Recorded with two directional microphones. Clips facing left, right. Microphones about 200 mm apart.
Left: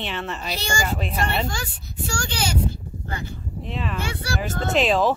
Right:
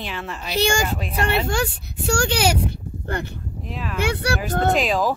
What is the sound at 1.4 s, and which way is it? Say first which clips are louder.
Speech: right 7 dB; 65° right (ahead or behind).